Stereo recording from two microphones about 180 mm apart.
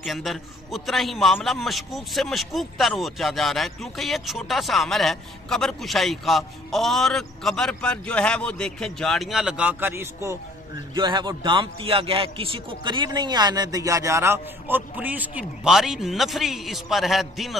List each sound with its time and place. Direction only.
0.0 s a man's voice: centre (ahead or behind)
11.0 s a man's voice: 25° right (ahead or behind); by 17.6 s centre (ahead or behind)